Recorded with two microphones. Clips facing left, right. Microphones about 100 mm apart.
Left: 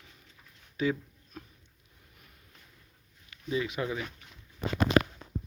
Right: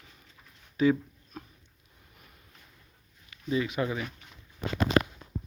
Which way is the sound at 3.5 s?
5° left (ahead or behind).